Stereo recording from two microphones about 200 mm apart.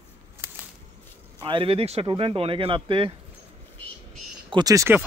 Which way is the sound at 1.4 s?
25° right (ahead or behind).